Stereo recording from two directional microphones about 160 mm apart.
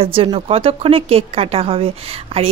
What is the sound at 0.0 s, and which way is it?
A woman's voice, 35° right (ahead or behind).